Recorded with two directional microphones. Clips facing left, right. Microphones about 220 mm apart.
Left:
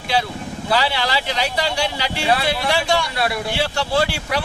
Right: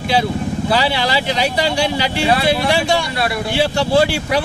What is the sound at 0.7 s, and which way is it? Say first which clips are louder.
Speech: right 1 dB; 15° right (ahead or behind).